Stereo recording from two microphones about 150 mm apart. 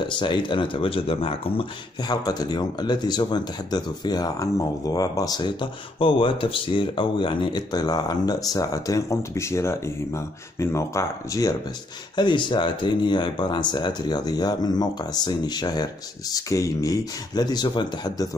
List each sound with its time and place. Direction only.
0.2 s speech: 30° left (ahead or behind)